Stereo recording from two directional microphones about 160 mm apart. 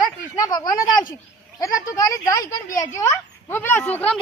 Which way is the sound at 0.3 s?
25° left (ahead or behind).